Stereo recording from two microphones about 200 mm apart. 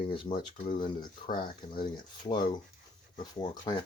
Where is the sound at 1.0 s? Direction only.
45° left (ahead or behind).